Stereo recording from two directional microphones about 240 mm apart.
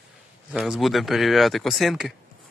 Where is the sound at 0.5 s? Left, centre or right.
Centre.